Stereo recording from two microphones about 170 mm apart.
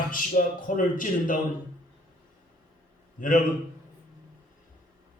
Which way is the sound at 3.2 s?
55° left (ahead or behind).